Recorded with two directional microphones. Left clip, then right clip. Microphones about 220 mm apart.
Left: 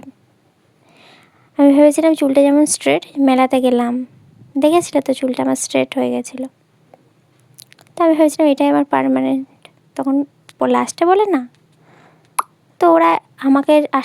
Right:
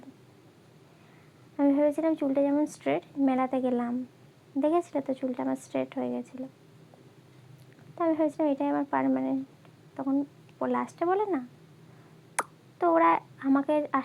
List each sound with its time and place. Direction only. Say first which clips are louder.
1.5 s speech: left 15 dB; 50° left (ahead or behind)
7.9 s speech: left 14 dB; 50° left (ahead or behind)
12.8 s speech: left 11 dB; 50° left (ahead or behind)